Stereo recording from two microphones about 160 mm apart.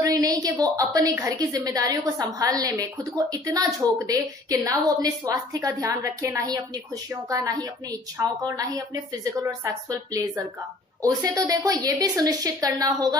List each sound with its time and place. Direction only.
0.0 s a woman's voice: 20° right (ahead or behind)